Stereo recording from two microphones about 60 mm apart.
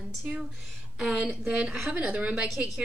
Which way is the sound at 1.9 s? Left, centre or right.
Right.